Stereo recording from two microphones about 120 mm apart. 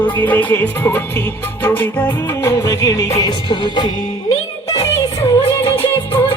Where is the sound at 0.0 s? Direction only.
15° left (ahead or behind); by 3.8 s 40° left (ahead or behind).